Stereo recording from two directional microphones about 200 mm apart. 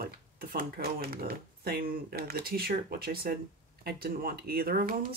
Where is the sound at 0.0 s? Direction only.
50° right (ahead or behind).